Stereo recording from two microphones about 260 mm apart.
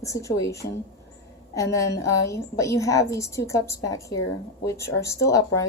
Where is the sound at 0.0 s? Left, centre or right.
Centre.